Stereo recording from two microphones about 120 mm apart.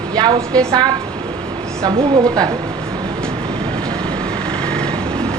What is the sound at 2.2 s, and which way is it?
Speech, 30° right (ahead or behind).